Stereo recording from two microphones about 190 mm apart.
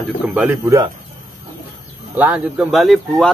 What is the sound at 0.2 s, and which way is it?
Speech, 5° right (ahead or behind).